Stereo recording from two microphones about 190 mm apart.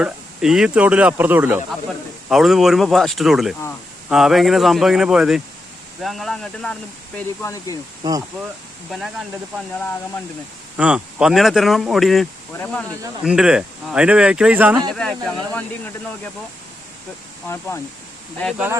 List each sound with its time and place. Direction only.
0.0 s speech: 5° right (ahead or behind)
7.2 s speech: 15° left (ahead or behind)
8.0 s speech: 20° right (ahead or behind)
8.9 s speech: centre (ahead or behind)
10.8 s speech: 5° right (ahead or behind)
13.2 s speech: 5° right (ahead or behind)
14.8 s speech: 5° left (ahead or behind)
17.5 s speech: 15° left (ahead or behind)